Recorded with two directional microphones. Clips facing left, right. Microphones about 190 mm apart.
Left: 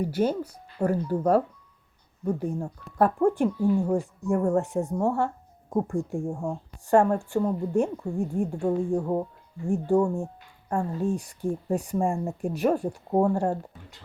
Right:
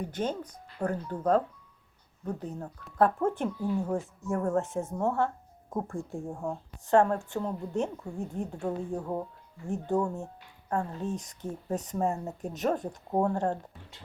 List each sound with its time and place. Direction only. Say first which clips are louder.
0.0 s speech: left 7 dB; 10° left (ahead or behind)